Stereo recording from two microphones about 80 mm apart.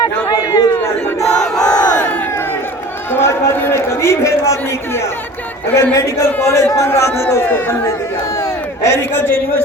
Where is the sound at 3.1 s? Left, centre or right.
Left.